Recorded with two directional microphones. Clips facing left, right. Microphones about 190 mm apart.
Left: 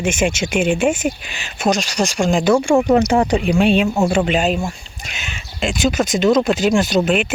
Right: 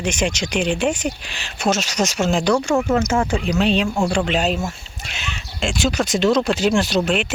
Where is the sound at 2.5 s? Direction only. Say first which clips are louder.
Left 7 dB; 25° left (ahead or behind); by 3.9 s 10° left (ahead or behind).